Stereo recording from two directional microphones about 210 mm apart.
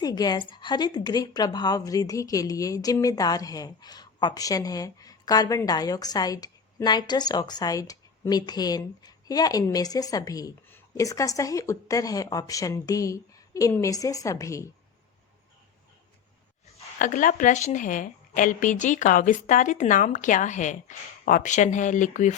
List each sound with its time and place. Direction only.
0.0 s a woman's voice: 20° left (ahead or behind)
17.0 s a woman's voice: 40° left (ahead or behind)